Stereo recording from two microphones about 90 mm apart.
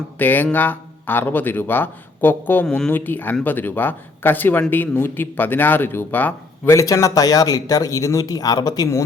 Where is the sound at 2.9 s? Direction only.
20° left (ahead or behind).